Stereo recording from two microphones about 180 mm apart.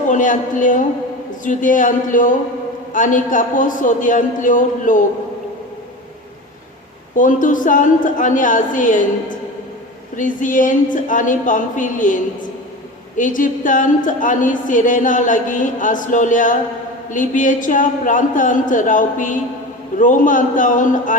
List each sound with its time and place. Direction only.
0.1 s a woman's voice: 45° left (ahead or behind)
7.2 s a woman's voice: 45° left (ahead or behind)
10.2 s a woman's voice: 45° left (ahead or behind)